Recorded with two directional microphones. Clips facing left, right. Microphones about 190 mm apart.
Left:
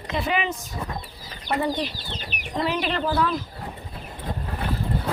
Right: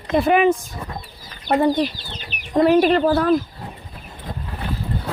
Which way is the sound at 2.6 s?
50° right (ahead or behind).